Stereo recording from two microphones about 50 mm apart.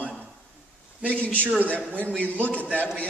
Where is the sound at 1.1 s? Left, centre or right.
Left.